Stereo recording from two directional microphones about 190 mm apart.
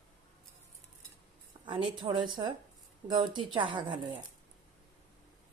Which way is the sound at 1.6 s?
25° right (ahead or behind).